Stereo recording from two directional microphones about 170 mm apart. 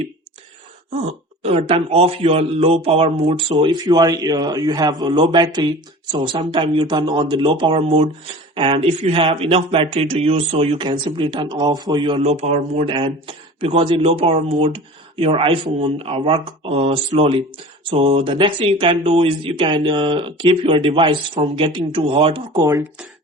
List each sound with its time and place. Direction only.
1.4 s speech: 35° right (ahead or behind)
12.9 s speech: 30° right (ahead or behind)